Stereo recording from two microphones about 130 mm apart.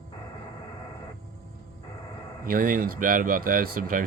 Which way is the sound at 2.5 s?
90° right.